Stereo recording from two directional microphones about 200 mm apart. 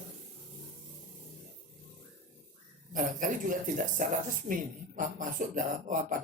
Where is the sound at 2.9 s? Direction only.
40° right (ahead or behind).